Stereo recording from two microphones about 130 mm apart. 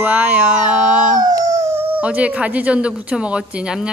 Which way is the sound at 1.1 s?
30° right (ahead or behind).